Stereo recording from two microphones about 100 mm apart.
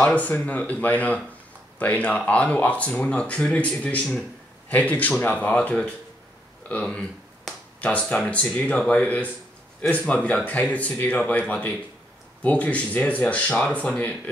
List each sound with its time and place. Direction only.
0.0 s speech: 15° left (ahead or behind)